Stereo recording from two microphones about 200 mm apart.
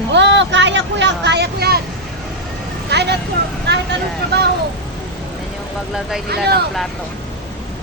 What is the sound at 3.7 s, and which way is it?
Vehicle, 55° right (ahead or behind).